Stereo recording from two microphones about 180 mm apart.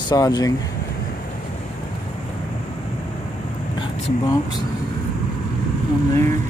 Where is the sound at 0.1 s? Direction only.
20° left (ahead or behind).